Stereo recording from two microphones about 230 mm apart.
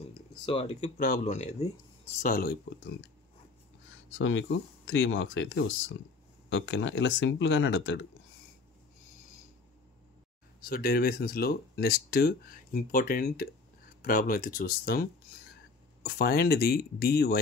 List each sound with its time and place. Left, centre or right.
0.5 s speech: left
2.2 s speech: left
4.1 s speech: left
10.6 s speech: left